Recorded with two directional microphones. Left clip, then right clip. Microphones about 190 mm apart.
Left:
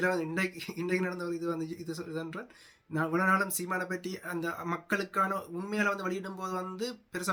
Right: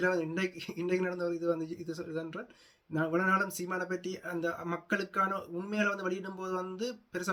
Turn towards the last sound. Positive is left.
turn(degrees=5)  # may be behind; listen again after turning